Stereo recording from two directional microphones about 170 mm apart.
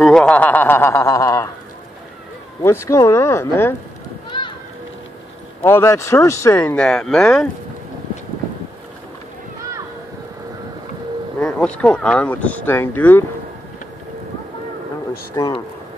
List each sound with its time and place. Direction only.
0.0 s speech: 5° left (ahead or behind)
2.6 s speech: 15° left (ahead or behind)
4.3 s a sound: 30° left (ahead or behind)
5.6 s speech: 15° left (ahead or behind)
11.3 s speech: 5° left (ahead or behind)
15.3 s speech: 25° left (ahead or behind)